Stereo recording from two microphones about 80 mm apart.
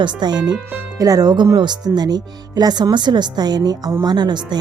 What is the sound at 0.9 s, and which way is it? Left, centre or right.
Speech, right.